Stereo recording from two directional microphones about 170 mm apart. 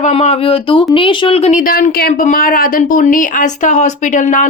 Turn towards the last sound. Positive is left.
turn(degrees=45)  # may be behind; listen again after turning